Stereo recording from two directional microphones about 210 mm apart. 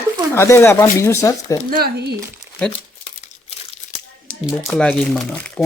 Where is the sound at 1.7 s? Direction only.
45° right (ahead or behind).